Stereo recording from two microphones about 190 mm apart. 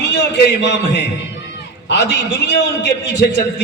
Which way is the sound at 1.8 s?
70° left (ahead or behind).